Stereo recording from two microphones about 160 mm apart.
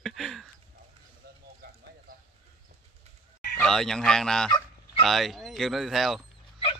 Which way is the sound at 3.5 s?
5° left (ahead or behind).